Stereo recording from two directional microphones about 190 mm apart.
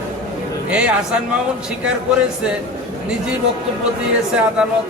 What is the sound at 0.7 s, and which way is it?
Speech, 5° right (ahead or behind).